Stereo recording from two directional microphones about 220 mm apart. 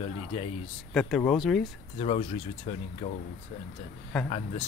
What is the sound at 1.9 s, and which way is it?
Speech, 30° left (ahead or behind).